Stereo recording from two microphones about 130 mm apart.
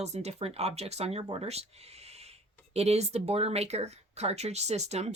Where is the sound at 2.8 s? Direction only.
55° right (ahead or behind).